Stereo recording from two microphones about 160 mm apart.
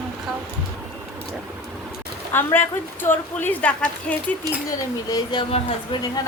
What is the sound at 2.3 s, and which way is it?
A woman's voice, 15° left (ahead or behind).